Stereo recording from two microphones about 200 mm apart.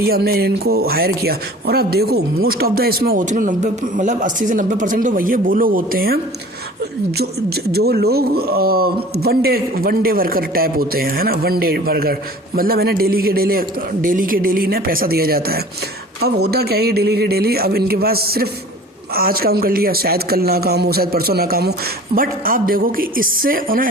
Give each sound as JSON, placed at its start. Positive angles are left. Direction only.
{"t": 0.0, "sound": "speech", "side_deg": -50}
{"t": 7.2, "sound": "speech", "side_deg": -50}